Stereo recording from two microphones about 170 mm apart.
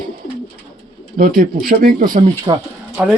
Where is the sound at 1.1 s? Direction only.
55° right (ahead or behind).